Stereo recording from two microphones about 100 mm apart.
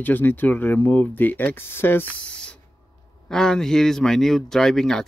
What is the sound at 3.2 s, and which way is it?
Speech, 5° left (ahead or behind).